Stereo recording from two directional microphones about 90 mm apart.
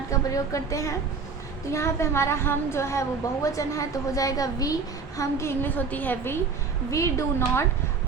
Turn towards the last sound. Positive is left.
turn(degrees=30)  # may be behind; listen again after turning